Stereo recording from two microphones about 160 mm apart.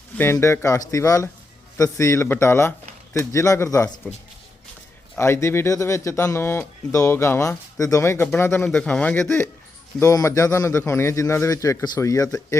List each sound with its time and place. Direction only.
0.2 s a man's voice: 15° left (ahead or behind)
5.1 s a man's voice: 15° left (ahead or behind)